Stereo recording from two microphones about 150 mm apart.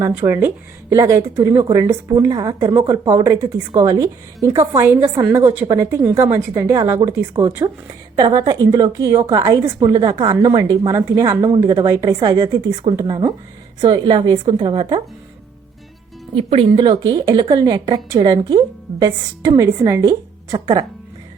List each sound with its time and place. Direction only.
0.0 s a woman's voice: 10° right (ahead or behind); by 15.0 s 35° right (ahead or behind)
16.3 s a woman's voice: 35° right (ahead or behind)